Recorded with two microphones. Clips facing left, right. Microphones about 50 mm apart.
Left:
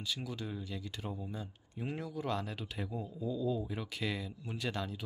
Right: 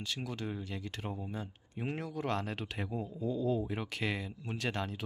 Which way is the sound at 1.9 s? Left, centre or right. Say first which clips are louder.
Right 2 dB; right.